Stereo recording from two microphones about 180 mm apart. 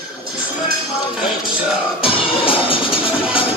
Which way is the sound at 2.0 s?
30° left (ahead or behind).